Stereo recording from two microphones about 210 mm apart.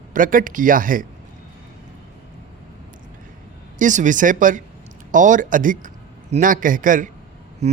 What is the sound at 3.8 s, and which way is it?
Speech, 35° right (ahead or behind).